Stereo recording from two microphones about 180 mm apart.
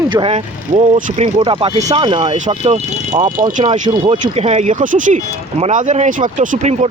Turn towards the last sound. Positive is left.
turn(degrees=-40)  # may be behind; listen again after turning